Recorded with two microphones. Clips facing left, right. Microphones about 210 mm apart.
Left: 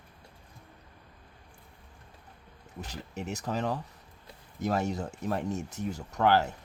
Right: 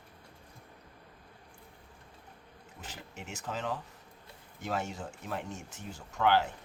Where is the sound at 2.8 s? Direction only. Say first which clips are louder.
Left 6 dB; 60° left (ahead or behind).